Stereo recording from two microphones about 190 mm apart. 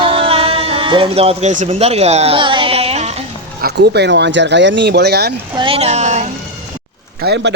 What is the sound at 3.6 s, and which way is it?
A man's voice, 60° right (ahead or behind).